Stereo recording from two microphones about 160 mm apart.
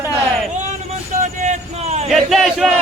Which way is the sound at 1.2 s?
50° right (ahead or behind).